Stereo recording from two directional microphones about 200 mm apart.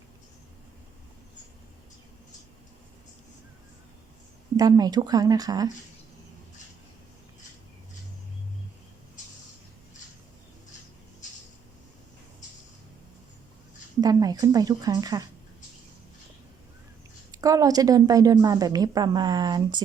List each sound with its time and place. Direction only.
4.5 s a woman's voice: 20° right (ahead or behind)
14.0 s a woman's voice: 20° right (ahead or behind)
17.3 s a woman's voice: 15° right (ahead or behind)